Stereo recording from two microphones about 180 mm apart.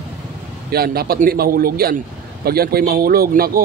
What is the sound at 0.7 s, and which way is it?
A man's voice, 60° right (ahead or behind).